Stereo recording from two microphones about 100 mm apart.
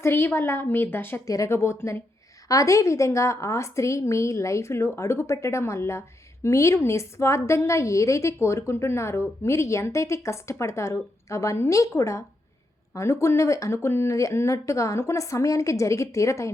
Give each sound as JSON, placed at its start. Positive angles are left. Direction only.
{"t": 0.0, "sound": "a woman's voice", "side_deg": 25}